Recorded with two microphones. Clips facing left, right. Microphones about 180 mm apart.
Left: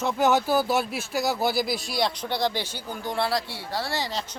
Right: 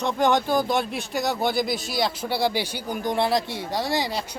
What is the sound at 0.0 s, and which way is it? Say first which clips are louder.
Speech: right 1 dB; 5° left (ahead or behind).